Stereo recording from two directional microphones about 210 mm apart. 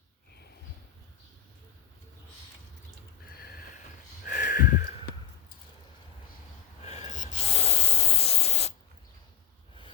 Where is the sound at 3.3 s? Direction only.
45° left (ahead or behind).